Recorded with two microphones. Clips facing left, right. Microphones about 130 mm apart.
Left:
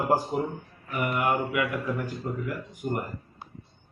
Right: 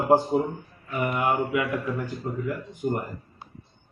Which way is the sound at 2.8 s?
15° right (ahead or behind).